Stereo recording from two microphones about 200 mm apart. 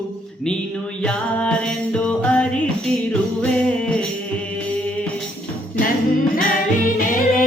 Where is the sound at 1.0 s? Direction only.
5° left (ahead or behind).